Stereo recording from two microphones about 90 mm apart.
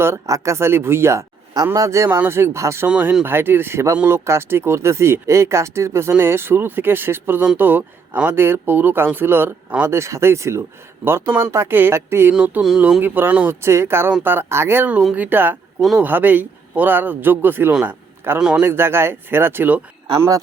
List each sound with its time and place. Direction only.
0.0 s speech: 35° right (ahead or behind)
2.0 s speech: 25° right (ahead or behind)
2.8 s a sound: 15° right (ahead or behind)
3.2 s speech: 25° right (ahead or behind)
12.3 s a sound: 10° right (ahead or behind)
13.0 s speech: 20° right (ahead or behind)
18.3 s a sound: 10° right (ahead or behind)
18.6 s speech: 25° right (ahead or behind)
20.1 s speech: 35° right (ahead or behind)